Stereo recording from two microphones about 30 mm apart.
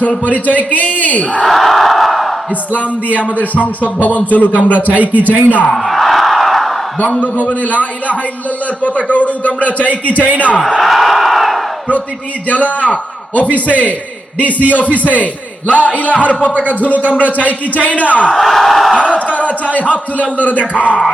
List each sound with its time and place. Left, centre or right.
0.3 s a man's voice: left
1.5 s crowd: centre
3.1 s a man's voice: left
4.5 s a man's voice: right
5.4 s a man's voice: left
5.7 s a sound: centre
7.0 s a man's voice: left
10.8 s crowd: centre
12.8 s a man's voice: left
16.1 s speech: left
18.3 s speech: centre
19.1 s speech: left